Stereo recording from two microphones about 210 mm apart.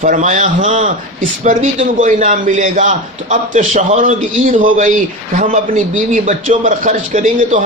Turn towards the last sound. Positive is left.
turn(degrees=-40)  # may be behind; listen again after turning